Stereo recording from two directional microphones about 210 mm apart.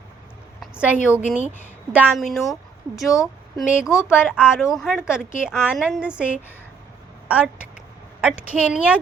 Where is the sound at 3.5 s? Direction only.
5° right (ahead or behind).